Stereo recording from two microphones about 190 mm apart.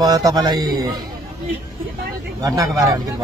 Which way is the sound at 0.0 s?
20° right (ahead or behind).